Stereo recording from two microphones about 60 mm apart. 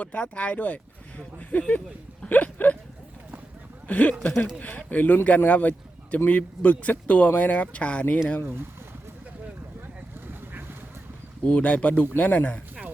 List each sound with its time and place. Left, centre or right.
0.0 s speech: left
2.2 s a sound: left
3.8 s speech: left
8.4 s speech: right
11.4 s speech: left